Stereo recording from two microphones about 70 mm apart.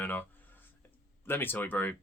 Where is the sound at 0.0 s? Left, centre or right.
Left.